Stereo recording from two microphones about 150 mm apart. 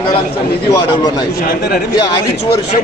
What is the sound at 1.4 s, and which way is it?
Speech, 90° left.